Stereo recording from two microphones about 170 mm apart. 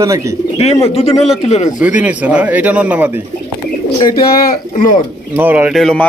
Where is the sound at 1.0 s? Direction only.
40° left (ahead or behind).